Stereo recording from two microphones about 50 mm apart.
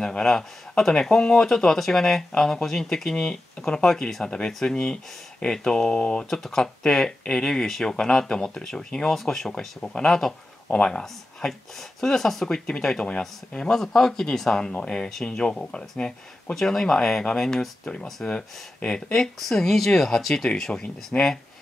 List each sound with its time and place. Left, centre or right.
0.0 s speech: centre
21.1 s speech: left